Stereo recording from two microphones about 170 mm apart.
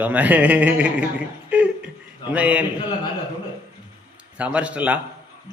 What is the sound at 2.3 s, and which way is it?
Speech, 10° right (ahead or behind).